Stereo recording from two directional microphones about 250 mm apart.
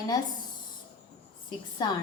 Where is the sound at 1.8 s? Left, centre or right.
Centre.